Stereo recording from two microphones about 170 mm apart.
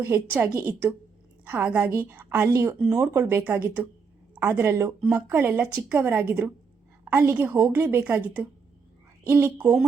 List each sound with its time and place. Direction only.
0.0 s a woman's voice: 10° right (ahead or behind)